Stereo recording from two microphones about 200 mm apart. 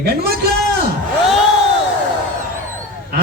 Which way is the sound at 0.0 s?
50° right (ahead or behind).